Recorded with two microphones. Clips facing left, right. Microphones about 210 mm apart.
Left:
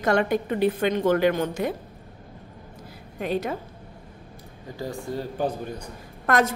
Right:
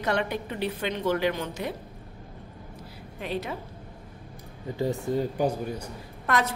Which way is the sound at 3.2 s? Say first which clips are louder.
Left 5 dB; 45° left (ahead or behind).